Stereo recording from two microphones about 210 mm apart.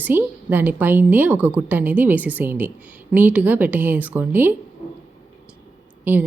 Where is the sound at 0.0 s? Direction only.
10° right (ahead or behind).